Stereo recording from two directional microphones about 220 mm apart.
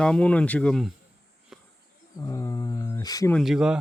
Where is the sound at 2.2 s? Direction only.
15° left (ahead or behind).